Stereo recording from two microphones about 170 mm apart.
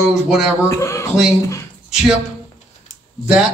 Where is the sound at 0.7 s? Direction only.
15° left (ahead or behind).